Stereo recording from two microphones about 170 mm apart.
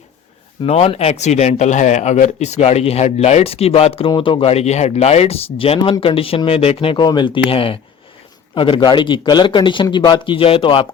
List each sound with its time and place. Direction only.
0.6 s a man's voice: 35° left (ahead or behind)